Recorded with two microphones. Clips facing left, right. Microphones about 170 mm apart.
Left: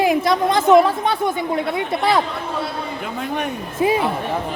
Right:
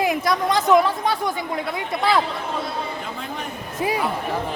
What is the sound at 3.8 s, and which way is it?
Speech, 25° left (ahead or behind).